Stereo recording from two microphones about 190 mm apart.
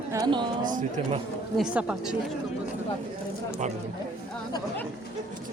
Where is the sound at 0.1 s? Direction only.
20° right (ahead or behind).